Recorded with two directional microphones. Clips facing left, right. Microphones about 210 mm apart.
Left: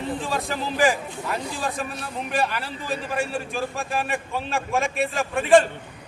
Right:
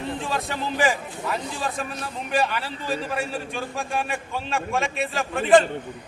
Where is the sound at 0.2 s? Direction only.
Centre (ahead or behind).